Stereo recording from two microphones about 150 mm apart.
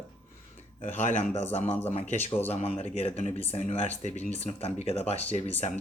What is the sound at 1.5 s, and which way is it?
Speech, 40° left (ahead or behind).